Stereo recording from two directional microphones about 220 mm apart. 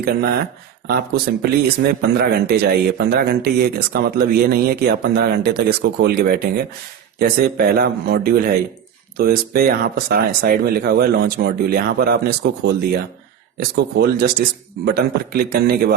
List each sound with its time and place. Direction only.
0.0 s speech: 45° right (ahead or behind)